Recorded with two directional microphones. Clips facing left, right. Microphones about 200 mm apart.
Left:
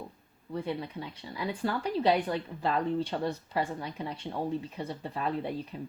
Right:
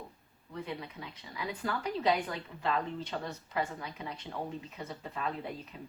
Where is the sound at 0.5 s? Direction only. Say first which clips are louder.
Left 6 dB; 30° left (ahead or behind).